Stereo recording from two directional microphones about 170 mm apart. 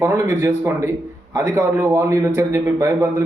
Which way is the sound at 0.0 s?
15° right (ahead or behind).